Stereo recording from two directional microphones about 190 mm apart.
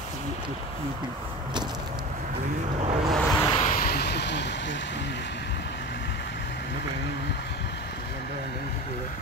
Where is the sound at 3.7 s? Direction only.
55° left (ahead or behind).